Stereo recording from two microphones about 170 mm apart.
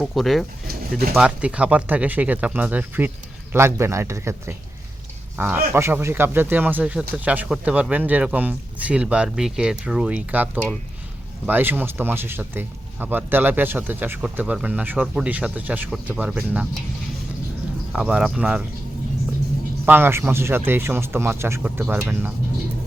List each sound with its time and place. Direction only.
0.0 s speech: centre (ahead or behind)
0.7 s pigeon: 60° right (ahead or behind)
1.1 s speech: 5° right (ahead or behind)
17.9 s speech: 5° right (ahead or behind)
19.8 s speech: 10° right (ahead or behind)